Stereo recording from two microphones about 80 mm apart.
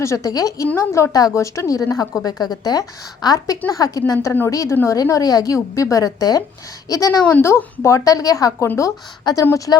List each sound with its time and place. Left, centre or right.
0.0 s a woman's voice: left
0.3 s a woman's voice: left
0.8 s a woman's voice: left
7.4 s a woman's voice: left
8.6 s a woman's voice: left
9.2 s a woman's voice: left